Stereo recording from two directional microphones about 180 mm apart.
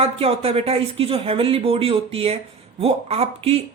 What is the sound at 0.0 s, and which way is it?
Speech, 35° right (ahead or behind).